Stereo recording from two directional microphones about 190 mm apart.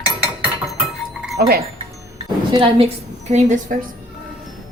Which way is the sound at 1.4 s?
55° right (ahead or behind).